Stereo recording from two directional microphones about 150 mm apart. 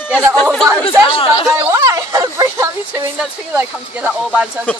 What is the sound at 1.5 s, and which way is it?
A woman's voice, 15° right (ahead or behind).